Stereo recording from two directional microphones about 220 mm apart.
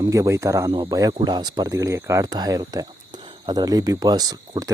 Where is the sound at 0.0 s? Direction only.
15° right (ahead or behind).